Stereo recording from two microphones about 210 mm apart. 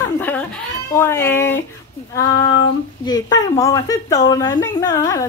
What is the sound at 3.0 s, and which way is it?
A woman's voice, 20° left (ahead or behind).